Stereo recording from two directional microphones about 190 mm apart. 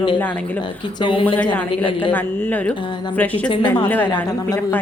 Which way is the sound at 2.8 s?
25° left (ahead or behind).